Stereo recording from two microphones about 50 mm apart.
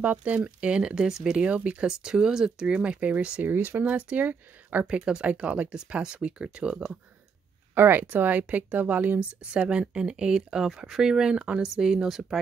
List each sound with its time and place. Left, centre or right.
0.0 s speech: right
1.9 s speech: centre
3.4 s speech: right
3.8 s speech: right
4.3 s speech: right
4.8 s speech: centre
7.7 s speech: right
9.5 s speech: right
11.6 s speech: centre